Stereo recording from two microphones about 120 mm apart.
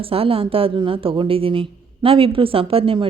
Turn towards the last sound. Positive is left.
turn(degrees=-50)  # may be behind; listen again after turning